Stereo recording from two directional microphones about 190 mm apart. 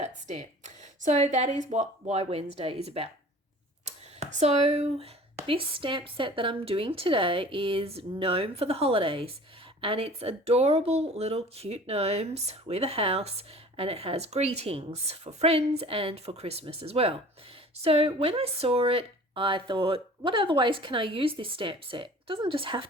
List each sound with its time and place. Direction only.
0.0 s a woman's voice: 35° right (ahead or behind)